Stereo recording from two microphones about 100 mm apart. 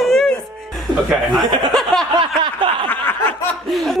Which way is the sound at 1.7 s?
5° left (ahead or behind).